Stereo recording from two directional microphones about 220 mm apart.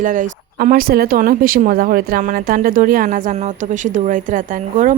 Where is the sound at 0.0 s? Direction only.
40° right (ahead or behind).